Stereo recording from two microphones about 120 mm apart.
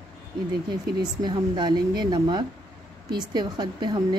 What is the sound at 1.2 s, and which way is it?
A woman's voice, 40° right (ahead or behind).